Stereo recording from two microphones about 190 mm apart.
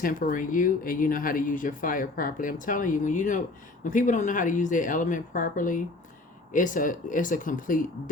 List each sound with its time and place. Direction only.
0.0 s speech: 45° left (ahead or behind)